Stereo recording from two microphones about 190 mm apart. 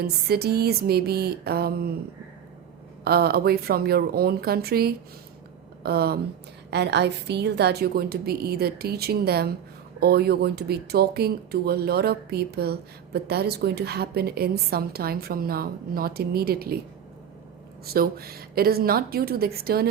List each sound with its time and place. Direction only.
0.0 s speech: 55° right (ahead or behind)
3.0 s speech: 55° right (ahead or behind)
17.8 s a woman's voice: 50° right (ahead or behind)